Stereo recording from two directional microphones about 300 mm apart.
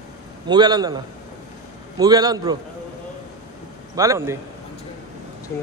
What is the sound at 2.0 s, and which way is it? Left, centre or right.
Speech, centre.